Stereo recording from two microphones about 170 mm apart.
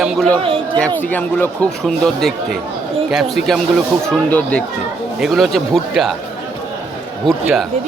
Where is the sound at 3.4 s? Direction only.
45° left (ahead or behind).